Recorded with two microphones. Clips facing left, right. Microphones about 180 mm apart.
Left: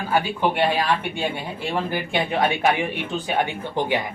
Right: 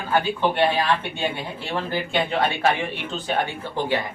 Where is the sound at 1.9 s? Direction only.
15° left (ahead or behind).